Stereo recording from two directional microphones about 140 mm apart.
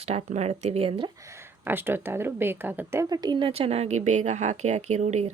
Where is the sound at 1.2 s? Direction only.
20° right (ahead or behind).